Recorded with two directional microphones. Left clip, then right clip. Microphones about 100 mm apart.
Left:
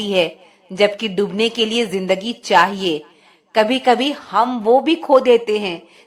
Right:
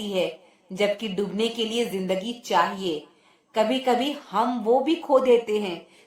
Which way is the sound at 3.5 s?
35° left (ahead or behind).